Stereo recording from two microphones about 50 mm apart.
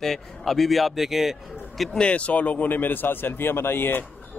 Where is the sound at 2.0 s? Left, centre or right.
Left.